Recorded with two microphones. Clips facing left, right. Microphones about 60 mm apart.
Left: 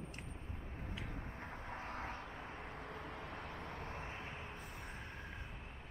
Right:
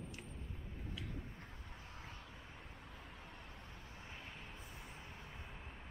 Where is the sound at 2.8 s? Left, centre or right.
Left.